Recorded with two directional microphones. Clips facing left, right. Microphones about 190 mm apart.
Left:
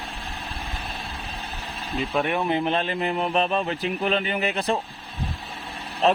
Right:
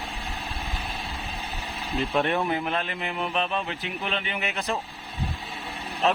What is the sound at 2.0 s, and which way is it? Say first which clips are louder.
Speech: even; centre (ahead or behind).